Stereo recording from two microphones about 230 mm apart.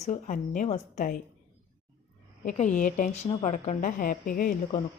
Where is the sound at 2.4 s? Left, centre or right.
Left.